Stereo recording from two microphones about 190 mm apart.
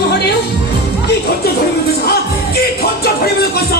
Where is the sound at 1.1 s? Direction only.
55° left (ahead or behind).